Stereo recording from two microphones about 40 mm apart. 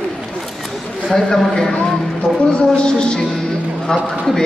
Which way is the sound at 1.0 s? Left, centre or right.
Centre.